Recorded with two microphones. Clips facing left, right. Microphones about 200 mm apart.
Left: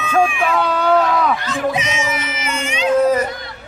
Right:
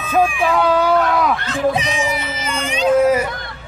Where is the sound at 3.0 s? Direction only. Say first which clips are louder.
Left 2 dB; 10° right (ahead or behind).